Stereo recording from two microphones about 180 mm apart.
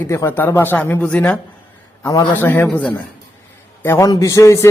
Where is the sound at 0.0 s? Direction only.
15° left (ahead or behind).